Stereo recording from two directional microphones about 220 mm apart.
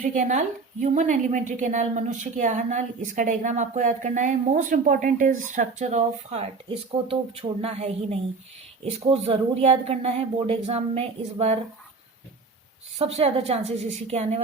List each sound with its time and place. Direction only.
0.0 s a woman's voice: 35° right (ahead or behind)
13.0 s speech: 25° right (ahead or behind)